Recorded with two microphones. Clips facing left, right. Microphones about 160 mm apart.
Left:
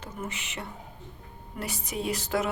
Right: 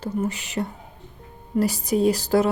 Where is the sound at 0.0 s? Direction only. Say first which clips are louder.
Right 11 dB; 35° right (ahead or behind).